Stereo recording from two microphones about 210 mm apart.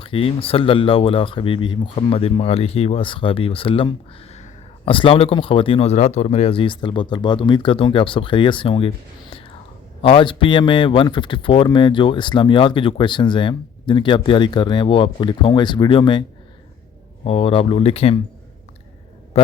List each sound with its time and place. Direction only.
0.0 s speech: 25° left (ahead or behind)
10.0 s speech: 25° left (ahead or behind)
17.2 s speech: 25° left (ahead or behind)